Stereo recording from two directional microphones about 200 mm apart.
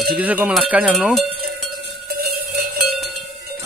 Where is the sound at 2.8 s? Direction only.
Centre (ahead or behind).